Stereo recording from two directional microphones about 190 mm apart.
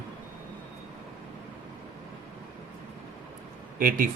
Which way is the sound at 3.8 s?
45° right (ahead or behind).